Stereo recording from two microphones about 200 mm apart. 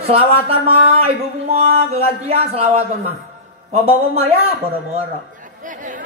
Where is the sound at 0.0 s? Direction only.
30° right (ahead or behind).